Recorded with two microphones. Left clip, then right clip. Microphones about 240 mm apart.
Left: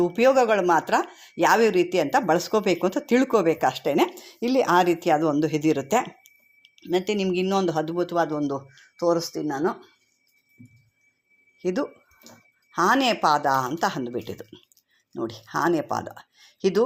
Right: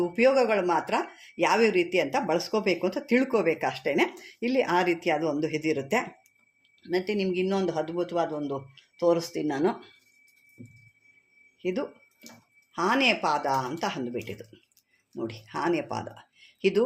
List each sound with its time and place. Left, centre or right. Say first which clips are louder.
0.2 s speech: left 3 dB; left
6.7 s a sound: left 4 dB; left
7.1 s speech: left 3 dB; left
9.3 s speech: left 1 dB; centre
11.6 s speech: left 4 dB; left